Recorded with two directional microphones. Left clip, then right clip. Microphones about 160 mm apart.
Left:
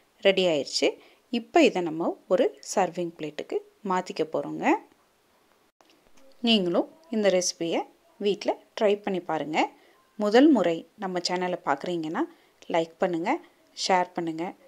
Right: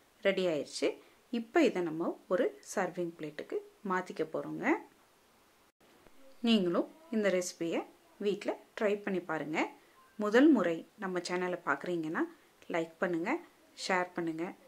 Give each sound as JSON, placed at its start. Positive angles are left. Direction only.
{"t": 0.2, "sound": "a woman's voice", "side_deg": 40}
{"t": 6.4, "sound": "a woman's voice", "side_deg": 35}